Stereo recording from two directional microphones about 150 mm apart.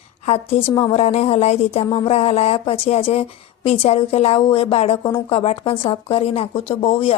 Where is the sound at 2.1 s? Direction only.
45° left (ahead or behind).